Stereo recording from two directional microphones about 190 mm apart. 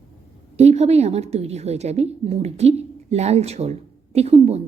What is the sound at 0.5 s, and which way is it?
A woman's voice, 35° right (ahead or behind).